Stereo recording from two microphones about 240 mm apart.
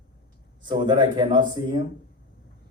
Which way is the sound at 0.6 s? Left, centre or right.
Centre.